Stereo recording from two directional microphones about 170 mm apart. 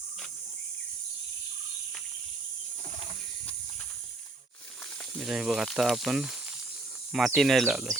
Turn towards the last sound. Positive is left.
turn(degrees=-5)  # may be behind; listen again after turning